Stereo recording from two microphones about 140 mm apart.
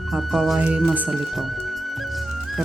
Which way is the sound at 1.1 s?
Centre (ahead or behind).